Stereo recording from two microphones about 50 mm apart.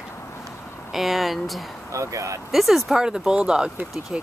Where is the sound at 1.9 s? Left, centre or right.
Right.